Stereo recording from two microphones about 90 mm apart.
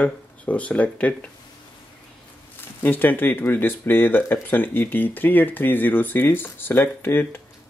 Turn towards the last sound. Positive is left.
turn(degrees=25)  # may be behind; listen again after turning